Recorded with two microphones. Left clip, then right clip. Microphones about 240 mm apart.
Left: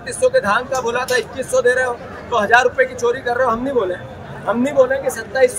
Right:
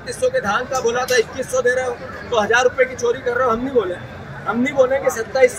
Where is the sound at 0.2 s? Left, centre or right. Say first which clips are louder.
Left 4 dB; centre.